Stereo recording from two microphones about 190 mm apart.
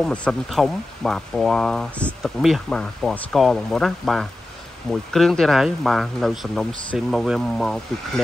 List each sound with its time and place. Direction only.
0.0 s speech: 5° left (ahead or behind)